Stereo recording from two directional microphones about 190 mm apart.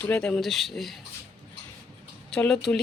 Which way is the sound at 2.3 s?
5° left (ahead or behind).